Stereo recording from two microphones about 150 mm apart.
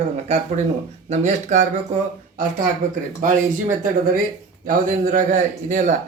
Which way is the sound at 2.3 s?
65° right (ahead or behind).